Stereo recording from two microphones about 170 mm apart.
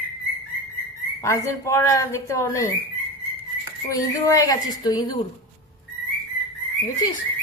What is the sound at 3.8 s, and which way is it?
A woman's voice, 20° left (ahead or behind).